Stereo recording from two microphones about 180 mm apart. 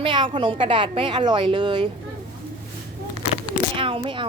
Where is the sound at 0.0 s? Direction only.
30° right (ahead or behind).